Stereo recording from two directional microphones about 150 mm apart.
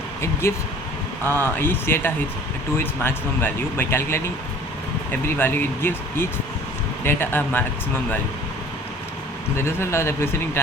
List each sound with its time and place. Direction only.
0.4 s speech: 15° left (ahead or behind)
5.4 s speech: 15° left (ahead or behind)
9.6 s speech: 15° left (ahead or behind)